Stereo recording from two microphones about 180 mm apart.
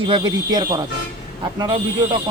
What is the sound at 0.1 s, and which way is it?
Speech, 25° right (ahead or behind).